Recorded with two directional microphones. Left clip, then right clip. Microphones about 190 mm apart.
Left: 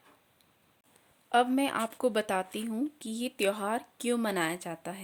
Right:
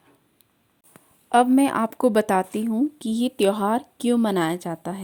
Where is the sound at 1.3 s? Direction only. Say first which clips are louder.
Right 8 dB; 25° right (ahead or behind).